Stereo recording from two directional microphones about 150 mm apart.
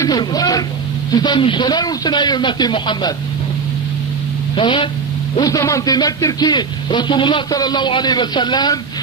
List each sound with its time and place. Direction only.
0.0 s a man's voice: 25° left (ahead or behind)
4.6 s speech: 35° left (ahead or behind)
5.4 s a man's voice: 20° left (ahead or behind)